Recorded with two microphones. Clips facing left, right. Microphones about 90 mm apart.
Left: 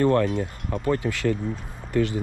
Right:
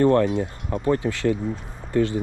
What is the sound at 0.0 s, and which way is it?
Speech, 35° right (ahead or behind).